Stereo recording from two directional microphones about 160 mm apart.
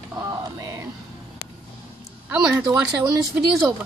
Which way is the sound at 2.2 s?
5° right (ahead or behind).